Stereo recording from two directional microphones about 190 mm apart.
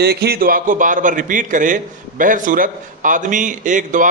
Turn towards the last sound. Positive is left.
turn(degrees=-45)  # may be behind; listen again after turning